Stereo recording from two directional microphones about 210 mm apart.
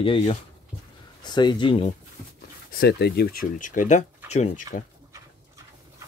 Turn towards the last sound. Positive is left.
turn(degrees=35)  # may be behind; listen again after turning